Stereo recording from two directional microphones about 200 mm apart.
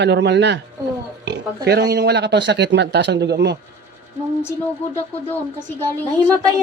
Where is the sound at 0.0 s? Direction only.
60° right (ahead or behind).